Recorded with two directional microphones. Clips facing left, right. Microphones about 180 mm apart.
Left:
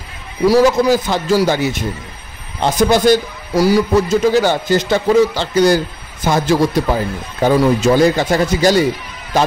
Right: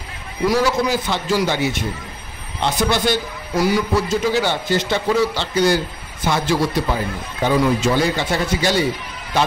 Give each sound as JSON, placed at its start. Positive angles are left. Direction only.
{"t": 0.5, "sound": "a man's voice", "side_deg": 40}